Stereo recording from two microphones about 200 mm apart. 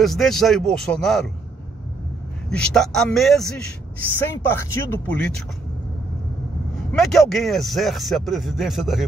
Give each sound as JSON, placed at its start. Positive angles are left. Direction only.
{"t": 0.0, "sound": "a man's voice", "side_deg": 0}
{"t": 2.5, "sound": "a man's voice", "side_deg": 0}
{"t": 6.9, "sound": "a man's voice", "side_deg": 0}